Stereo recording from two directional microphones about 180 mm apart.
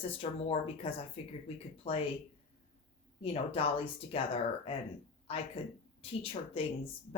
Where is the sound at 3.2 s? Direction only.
30° left (ahead or behind).